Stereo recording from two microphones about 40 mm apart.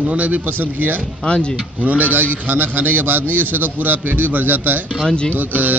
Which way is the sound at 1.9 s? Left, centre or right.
Right.